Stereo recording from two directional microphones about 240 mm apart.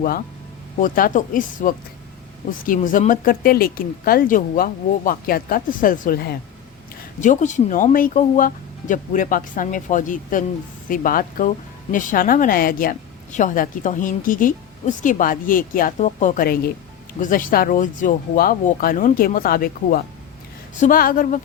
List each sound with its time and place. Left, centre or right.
0.8 s speech: left